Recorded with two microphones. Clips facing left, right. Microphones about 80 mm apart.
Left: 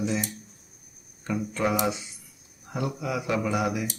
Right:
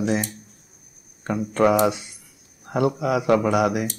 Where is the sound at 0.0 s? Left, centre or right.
Right.